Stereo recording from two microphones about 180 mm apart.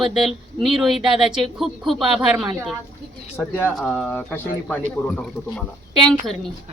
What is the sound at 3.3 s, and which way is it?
Speech, 10° left (ahead or behind).